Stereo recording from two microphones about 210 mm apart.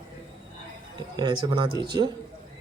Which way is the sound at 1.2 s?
20° right (ahead or behind).